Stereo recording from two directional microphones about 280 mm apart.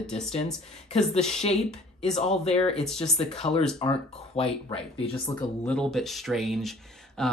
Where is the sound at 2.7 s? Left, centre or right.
Centre.